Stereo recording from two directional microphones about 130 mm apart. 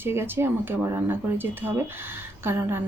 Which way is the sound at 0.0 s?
20° right (ahead or behind).